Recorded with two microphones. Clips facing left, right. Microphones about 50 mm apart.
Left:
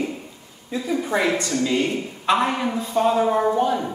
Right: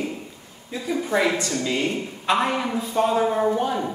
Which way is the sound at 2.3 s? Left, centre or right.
Centre.